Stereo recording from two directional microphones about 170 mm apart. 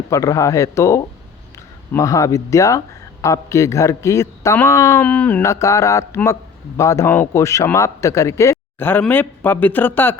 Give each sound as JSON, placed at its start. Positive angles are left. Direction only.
{"t": 0.1, "sound": "speech", "side_deg": 20}